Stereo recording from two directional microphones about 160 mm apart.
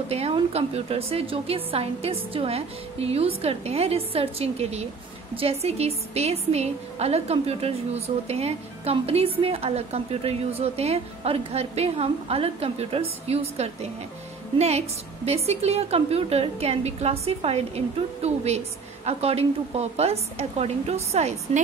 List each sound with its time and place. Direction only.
0.1 s a woman's voice: 40° right (ahead or behind)